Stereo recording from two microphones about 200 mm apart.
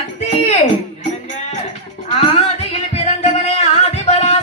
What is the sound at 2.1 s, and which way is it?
Music, 30° left (ahead or behind).